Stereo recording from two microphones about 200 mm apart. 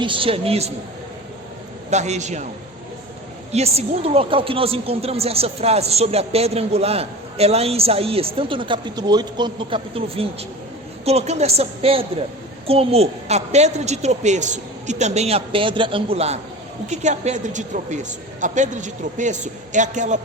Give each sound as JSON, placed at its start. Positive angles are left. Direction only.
{"t": 0.0, "sound": "a woman's voice", "side_deg": -25}
{"t": 1.9, "sound": "a woman's voice", "side_deg": -35}
{"t": 3.5, "sound": "a woman's voice", "side_deg": -30}